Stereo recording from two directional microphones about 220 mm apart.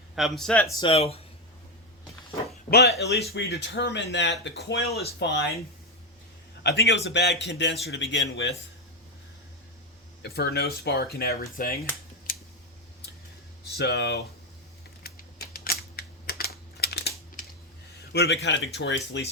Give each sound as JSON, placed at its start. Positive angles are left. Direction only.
{"t": 0.2, "sound": "speech", "side_deg": 0}
{"t": 0.8, "sound": "speech", "side_deg": 25}
{"t": 2.6, "sound": "speech", "side_deg": 45}
{"t": 6.6, "sound": "speech", "side_deg": 50}
{"t": 10.2, "sound": "speech", "side_deg": 45}
{"t": 13.7, "sound": "speech", "side_deg": 50}
{"t": 15.0, "sound": "typing", "side_deg": 45}
{"t": 18.1, "sound": "a man's voice", "side_deg": 50}